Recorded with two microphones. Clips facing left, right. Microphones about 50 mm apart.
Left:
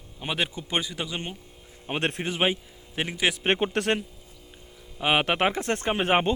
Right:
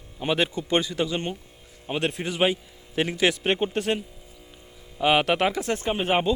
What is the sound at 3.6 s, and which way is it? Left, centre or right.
Speech, left.